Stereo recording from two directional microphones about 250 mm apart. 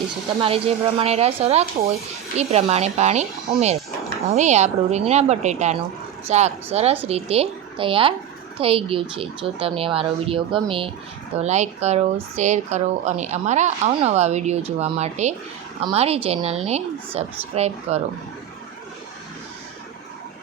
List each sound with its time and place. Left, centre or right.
0.4 s speech: right